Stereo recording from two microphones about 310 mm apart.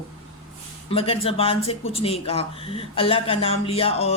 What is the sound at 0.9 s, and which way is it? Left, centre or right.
Speech, centre.